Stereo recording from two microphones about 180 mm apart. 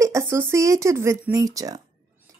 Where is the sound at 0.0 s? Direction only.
15° right (ahead or behind).